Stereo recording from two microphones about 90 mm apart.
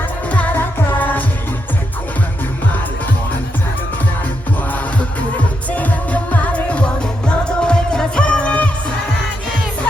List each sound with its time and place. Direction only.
0.3 s music: 15° left (ahead or behind)
5.7 s music of asia: 20° left (ahead or behind)